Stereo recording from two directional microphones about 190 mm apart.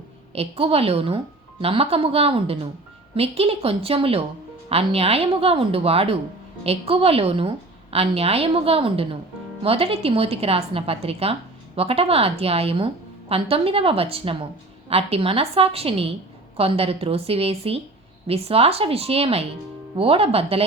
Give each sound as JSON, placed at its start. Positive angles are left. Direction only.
{"t": 0.3, "sound": "a woman's voice", "side_deg": -30}